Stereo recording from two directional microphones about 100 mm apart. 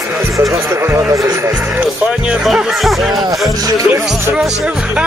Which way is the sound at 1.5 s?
10° right (ahead or behind).